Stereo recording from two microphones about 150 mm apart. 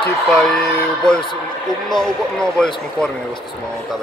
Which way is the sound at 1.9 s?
5° left (ahead or behind).